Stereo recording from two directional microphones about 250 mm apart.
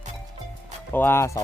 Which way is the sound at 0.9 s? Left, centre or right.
Centre.